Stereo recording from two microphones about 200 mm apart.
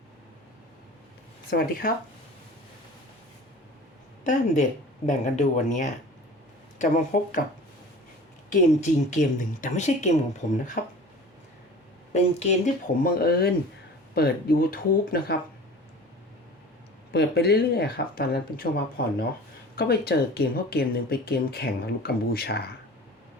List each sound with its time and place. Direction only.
1.5 s speech: 50° left (ahead or behind)
5.0 s speech: 35° left (ahead or behind)
8.4 s speech: 35° left (ahead or behind)
12.1 s speech: 35° left (ahead or behind)
13.0 s speech: 45° left (ahead or behind)
17.1 s speech: 55° left (ahead or behind)